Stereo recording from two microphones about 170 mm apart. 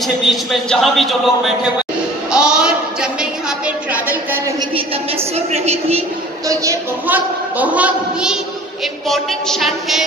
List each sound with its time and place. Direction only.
0.0 s speech: centre (ahead or behind)
2.3 s a sound: 5° right (ahead or behind)
4.7 s a woman's voice: 35° right (ahead or behind)
6.4 s a woman's voice: 20° right (ahead or behind); by 10.0 s centre (ahead or behind)